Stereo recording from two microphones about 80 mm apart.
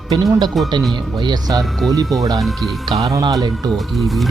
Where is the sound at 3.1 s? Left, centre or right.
Right.